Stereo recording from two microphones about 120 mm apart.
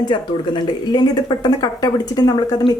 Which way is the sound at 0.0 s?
40° left (ahead or behind).